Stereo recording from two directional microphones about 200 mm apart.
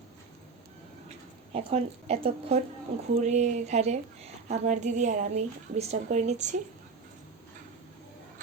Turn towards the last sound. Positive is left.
turn(degrees=-35)  # may be behind; listen again after turning